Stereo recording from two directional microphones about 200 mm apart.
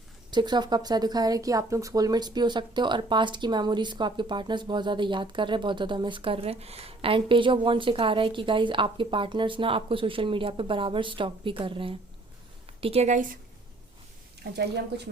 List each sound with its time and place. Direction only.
0.3 s a woman's voice: 20° right (ahead or behind)
14.5 s speech: 55° right (ahead or behind)